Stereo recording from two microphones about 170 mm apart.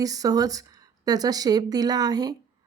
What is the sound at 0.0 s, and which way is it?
Speech, 20° right (ahead or behind).